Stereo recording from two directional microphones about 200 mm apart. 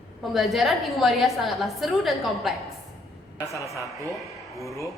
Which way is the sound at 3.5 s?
15° left (ahead or behind).